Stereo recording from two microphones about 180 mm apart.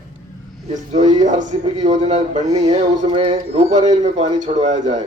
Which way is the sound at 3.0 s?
25° right (ahead or behind).